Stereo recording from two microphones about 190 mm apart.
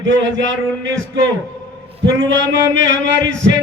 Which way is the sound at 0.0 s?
70° right (ahead or behind).